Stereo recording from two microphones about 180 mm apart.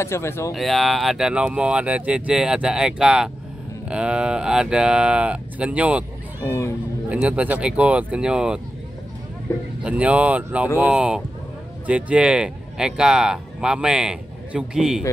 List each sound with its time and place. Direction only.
0.0 s speech: 15° left (ahead or behind)
0.5 s speech: centre (ahead or behind)
6.4 s speech: 15° left (ahead or behind)
7.1 s speech: 5° right (ahead or behind)
9.8 s speech: 5° right (ahead or behind)